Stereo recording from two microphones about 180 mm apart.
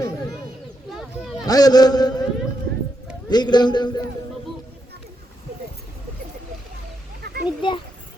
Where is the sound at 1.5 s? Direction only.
20° left (ahead or behind).